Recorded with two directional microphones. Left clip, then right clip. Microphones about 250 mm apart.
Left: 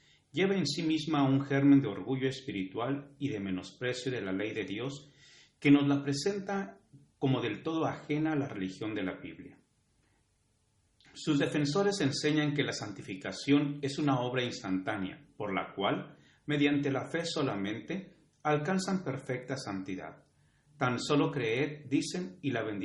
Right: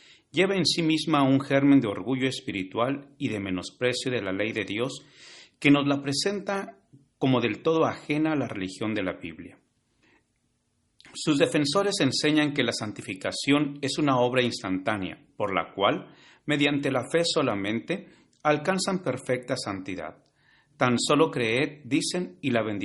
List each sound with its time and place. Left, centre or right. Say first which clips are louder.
0.3 s speech: right 7 dB; right
10.9 s speech: right 6 dB; right